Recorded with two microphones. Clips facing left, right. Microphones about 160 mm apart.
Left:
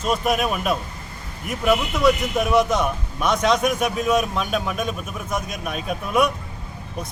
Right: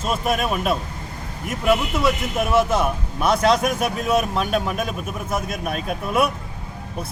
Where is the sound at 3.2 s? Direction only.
30° right (ahead or behind).